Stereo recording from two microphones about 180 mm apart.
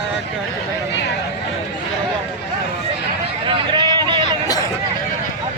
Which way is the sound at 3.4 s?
25° right (ahead or behind).